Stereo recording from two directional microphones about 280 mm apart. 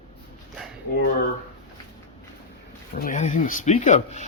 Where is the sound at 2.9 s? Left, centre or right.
Left.